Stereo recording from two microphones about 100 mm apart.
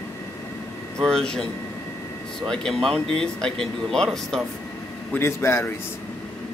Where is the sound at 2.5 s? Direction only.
5° left (ahead or behind).